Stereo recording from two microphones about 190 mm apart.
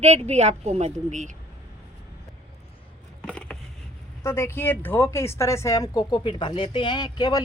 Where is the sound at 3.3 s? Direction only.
5° left (ahead or behind).